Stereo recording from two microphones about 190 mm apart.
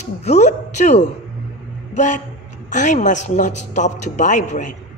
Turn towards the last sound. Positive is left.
turn(degrees=40)  # may be behind; listen again after turning